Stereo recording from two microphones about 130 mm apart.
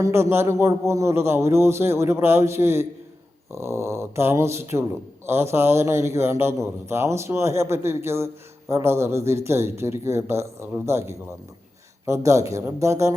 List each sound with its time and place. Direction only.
0.0 s speech: 20° right (ahead or behind)